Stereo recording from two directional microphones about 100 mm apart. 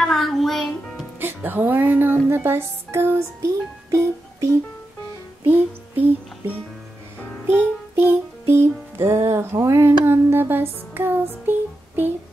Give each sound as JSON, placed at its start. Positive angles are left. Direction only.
{"t": 0.0, "sound": "music", "side_deg": 0}
{"t": 1.2, "sound": "music", "side_deg": -20}
{"t": 3.4, "sound": "speech", "side_deg": -30}
{"t": 5.4, "sound": "music", "side_deg": -20}
{"t": 7.9, "sound": "music", "side_deg": -20}